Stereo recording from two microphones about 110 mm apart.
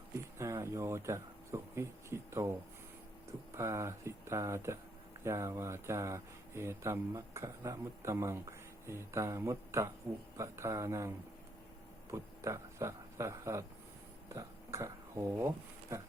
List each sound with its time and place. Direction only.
0.3 s a sound: 25° right (ahead or behind)
3.5 s speech: 25° right (ahead or behind)
12.1 s speech: 25° right (ahead or behind)